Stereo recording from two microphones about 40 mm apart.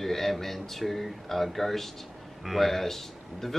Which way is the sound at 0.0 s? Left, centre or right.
Centre.